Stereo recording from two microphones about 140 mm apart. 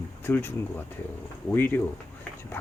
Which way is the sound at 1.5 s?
15° left (ahead or behind).